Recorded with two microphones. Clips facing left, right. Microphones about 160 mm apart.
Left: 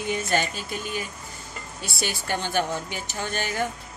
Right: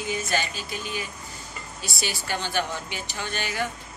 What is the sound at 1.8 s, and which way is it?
A woman's voice, 55° left (ahead or behind).